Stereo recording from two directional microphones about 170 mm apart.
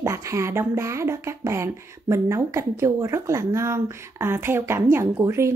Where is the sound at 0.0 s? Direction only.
15° right (ahead or behind).